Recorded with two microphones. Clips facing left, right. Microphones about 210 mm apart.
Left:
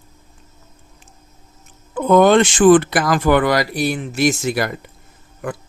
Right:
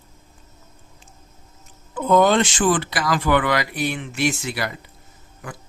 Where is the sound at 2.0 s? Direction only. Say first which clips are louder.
Left 5 dB; 55° left (ahead or behind).